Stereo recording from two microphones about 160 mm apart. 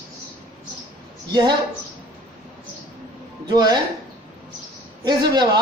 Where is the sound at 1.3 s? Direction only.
25° right (ahead or behind).